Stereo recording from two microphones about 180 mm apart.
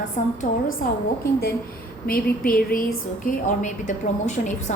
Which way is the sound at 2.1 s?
55° left (ahead or behind).